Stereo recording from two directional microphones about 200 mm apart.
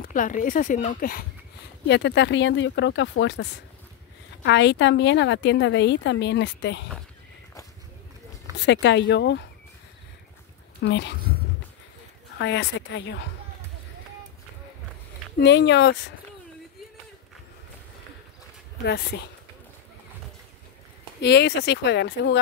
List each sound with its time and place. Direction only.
0.1 s speech: 40° left (ahead or behind)
1.9 s a woman's voice: 60° left (ahead or behind)
8.5 s a woman's voice: 60° left (ahead or behind)
10.8 s a woman's voice: 60° left (ahead or behind)
12.4 s a woman's voice: 65° left (ahead or behind)
15.3 s a woman's voice: 60° left (ahead or behind)
19.1 s a woman's voice: 60° left (ahead or behind)
21.2 s a woman's voice: 55° left (ahead or behind)